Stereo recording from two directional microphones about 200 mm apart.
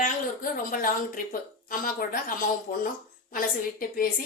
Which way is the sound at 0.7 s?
45° left (ahead or behind).